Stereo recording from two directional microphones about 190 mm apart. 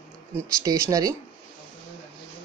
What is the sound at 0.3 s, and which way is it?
Speech, 15° right (ahead or behind).